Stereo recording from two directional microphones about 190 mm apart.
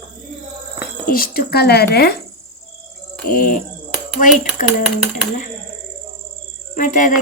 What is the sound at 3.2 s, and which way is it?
Speech, 45° left (ahead or behind).